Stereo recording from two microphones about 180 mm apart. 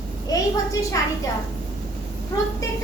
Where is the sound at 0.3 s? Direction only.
20° left (ahead or behind).